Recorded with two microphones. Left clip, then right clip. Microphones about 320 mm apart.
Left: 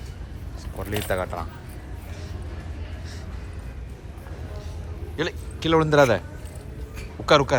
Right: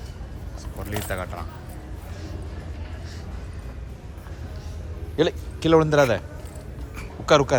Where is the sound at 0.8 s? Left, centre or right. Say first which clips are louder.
Left 4 dB; centre.